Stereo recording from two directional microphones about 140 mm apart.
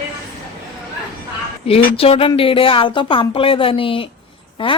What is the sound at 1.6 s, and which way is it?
A woman's voice, 45° left (ahead or behind).